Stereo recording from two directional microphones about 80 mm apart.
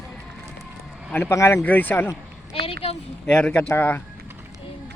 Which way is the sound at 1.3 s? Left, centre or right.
Left.